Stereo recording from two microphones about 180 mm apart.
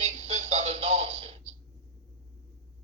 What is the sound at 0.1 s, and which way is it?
Music, 35° right (ahead or behind).